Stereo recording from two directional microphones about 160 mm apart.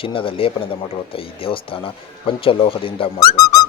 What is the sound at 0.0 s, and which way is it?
Speech, 35° left (ahead or behind).